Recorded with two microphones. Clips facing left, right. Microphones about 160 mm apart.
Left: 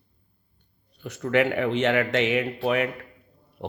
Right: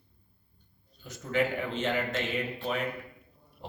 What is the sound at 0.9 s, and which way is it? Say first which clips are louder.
A man's voice: left 7 dB; 70° left (ahead or behind).